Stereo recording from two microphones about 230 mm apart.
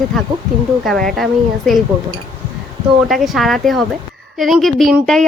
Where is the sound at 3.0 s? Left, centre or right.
Centre.